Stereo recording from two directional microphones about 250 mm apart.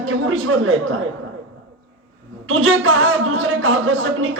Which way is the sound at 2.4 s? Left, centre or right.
Right.